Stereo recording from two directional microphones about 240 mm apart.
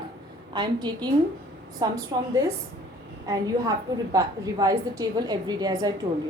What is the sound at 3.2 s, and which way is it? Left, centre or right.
A woman's voice, centre.